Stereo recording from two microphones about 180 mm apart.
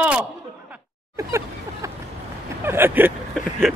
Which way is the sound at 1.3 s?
15° right (ahead or behind).